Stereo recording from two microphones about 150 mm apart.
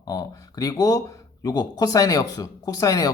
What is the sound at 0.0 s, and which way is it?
Speech, 25° left (ahead or behind).